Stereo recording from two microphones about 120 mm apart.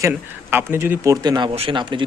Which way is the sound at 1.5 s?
45° right (ahead or behind).